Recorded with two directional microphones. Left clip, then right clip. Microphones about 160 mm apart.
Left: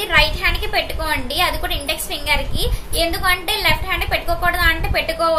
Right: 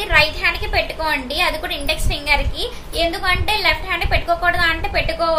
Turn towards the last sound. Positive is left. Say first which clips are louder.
# left 1 dB
turn(degrees=0)  # may be behind; listen again after turning